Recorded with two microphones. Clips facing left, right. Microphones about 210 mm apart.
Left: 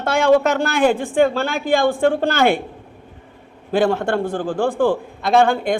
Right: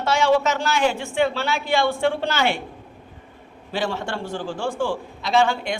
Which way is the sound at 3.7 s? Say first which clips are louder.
Left 9 dB; 55° left (ahead or behind).